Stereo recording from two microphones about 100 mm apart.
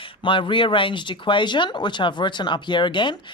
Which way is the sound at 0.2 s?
55° left (ahead or behind).